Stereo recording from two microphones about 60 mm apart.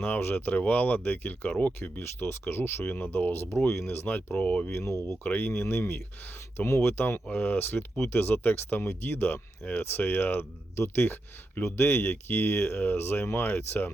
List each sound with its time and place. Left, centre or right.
0.0 s speech: left
2.0 s speech: left
2.8 s speech: left
4.0 s speech: left
4.7 s speech: left
5.2 s speech: left
5.5 s speech: left